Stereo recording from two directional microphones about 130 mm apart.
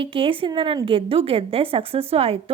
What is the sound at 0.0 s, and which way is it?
A woman's voice, 45° right (ahead or behind).